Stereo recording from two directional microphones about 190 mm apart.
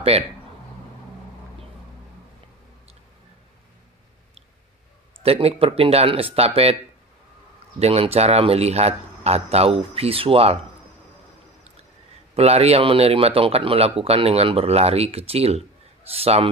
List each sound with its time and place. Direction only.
5.2 s speech: 30° right (ahead or behind)
7.8 s speech: 30° right (ahead or behind)
12.4 s speech: 35° right (ahead or behind)